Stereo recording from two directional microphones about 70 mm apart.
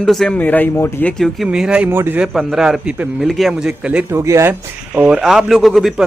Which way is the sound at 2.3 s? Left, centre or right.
Centre.